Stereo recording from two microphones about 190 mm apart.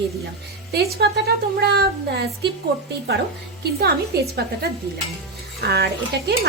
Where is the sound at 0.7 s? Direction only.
55° right (ahead or behind).